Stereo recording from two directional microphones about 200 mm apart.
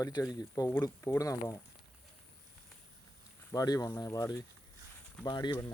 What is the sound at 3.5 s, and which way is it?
Speech, 20° left (ahead or behind).